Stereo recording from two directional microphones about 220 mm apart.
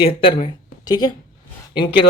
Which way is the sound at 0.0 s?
25° left (ahead or behind).